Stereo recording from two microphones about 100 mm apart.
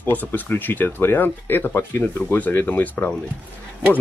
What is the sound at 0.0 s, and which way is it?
Speech, 20° left (ahead or behind).